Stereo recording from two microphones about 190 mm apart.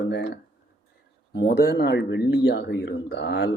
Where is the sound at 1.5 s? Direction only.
50° left (ahead or behind).